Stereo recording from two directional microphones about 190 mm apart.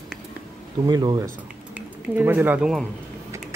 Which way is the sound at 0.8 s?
20° right (ahead or behind).